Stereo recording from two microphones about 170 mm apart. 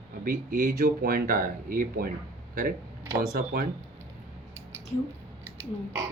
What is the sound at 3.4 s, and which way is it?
Speech, 60° right (ahead or behind).